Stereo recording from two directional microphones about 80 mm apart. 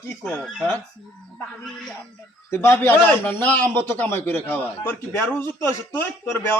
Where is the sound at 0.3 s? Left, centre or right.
Centre.